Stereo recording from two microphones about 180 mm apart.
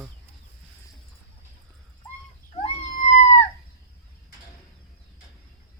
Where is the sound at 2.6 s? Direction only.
40° left (ahead or behind).